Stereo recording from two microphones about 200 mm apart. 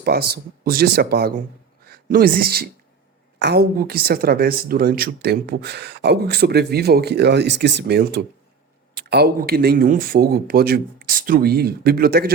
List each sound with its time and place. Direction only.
0.0 s a woman's voice: 50° right (ahead or behind)